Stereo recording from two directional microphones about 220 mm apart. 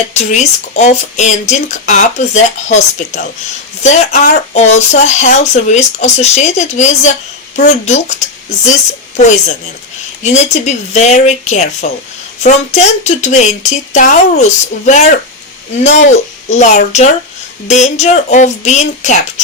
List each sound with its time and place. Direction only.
0.1 s speech: 30° left (ahead or behind)
10.2 s speech: 30° left (ahead or behind)